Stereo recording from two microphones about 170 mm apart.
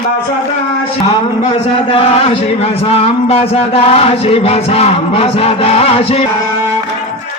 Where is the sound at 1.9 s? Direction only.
35° left (ahead or behind).